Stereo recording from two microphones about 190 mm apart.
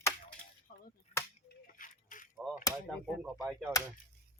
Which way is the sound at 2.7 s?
15° left (ahead or behind).